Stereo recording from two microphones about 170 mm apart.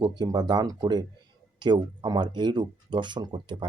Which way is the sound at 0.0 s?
25° right (ahead or behind).